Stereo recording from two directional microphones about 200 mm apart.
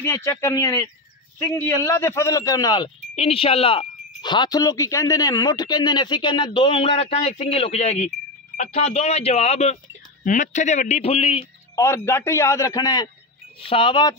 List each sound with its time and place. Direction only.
0.0 s a man's voice: 15° left (ahead or behind)
11.7 s a man's voice: 15° left (ahead or behind)